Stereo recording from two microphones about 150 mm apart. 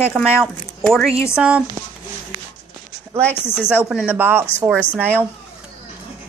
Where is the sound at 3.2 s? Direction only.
15° left (ahead or behind).